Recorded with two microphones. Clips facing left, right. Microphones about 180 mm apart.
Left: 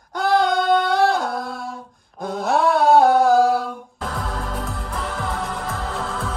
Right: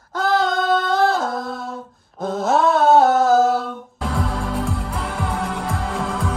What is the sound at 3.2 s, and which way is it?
Music, centre (ahead or behind).